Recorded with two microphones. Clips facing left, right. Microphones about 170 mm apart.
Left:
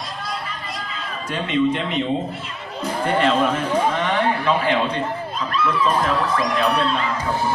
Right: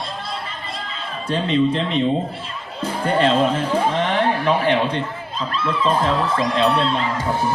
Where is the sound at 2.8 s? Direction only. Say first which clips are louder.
Right 1 dB; 30° right (ahead or behind).